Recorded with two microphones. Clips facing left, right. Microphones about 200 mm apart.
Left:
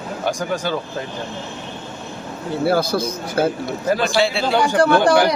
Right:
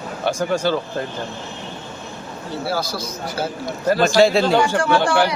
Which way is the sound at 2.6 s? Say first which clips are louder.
Left 8 dB; 55° left (ahead or behind).